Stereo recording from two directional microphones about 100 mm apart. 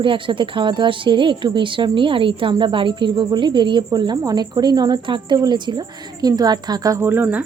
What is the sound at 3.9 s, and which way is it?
Speech, 45° right (ahead or behind).